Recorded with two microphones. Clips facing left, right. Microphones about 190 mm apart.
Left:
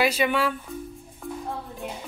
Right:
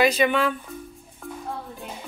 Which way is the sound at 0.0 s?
5° left (ahead or behind).